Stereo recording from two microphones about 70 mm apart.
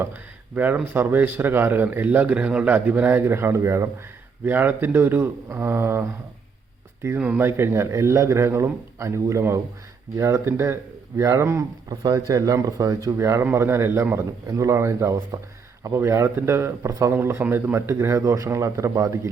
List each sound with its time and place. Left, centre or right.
0.0 s a man's voice: right
4.4 s a man's voice: right
7.3 s a man's voice: right
11.9 s speech: right
12.3 s speech: right
13.1 s a man's voice: right
13.4 s a man's voice: right
14.4 s a man's voice: right
16.9 s a man's voice: right
17.2 s a man's voice: right
17.7 s a man's voice: right
18.2 s a man's voice: right